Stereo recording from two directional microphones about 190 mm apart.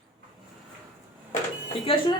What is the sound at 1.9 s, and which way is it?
Speech, 30° left (ahead or behind).